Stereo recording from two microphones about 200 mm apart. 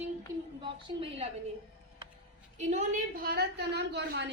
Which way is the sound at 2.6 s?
35° right (ahead or behind).